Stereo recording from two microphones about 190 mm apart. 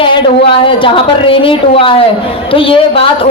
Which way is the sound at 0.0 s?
25° left (ahead or behind).